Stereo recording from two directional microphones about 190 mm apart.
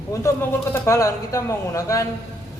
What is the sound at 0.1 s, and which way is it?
A man's voice, 15° left (ahead or behind).